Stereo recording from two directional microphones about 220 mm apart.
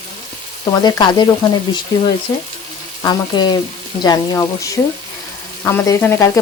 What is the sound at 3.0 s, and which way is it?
Speech, 20° left (ahead or behind).